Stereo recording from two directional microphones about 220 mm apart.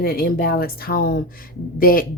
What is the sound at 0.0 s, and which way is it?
Speech, 45° left (ahead or behind).